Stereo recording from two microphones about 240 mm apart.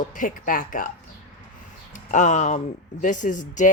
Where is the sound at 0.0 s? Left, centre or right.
Left.